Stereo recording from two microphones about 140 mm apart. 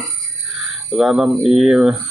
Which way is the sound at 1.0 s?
5° right (ahead or behind).